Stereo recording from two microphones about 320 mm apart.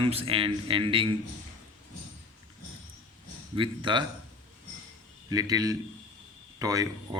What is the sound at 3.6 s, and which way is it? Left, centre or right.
Speech, centre.